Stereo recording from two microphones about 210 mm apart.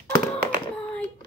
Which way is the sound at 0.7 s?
5° left (ahead or behind).